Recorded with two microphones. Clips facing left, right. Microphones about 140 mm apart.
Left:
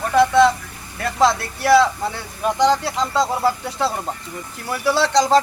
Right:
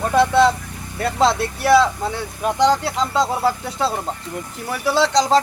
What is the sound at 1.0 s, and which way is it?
Speech, 25° right (ahead or behind).